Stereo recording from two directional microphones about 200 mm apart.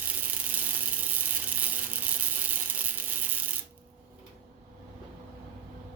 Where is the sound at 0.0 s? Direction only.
10° right (ahead or behind).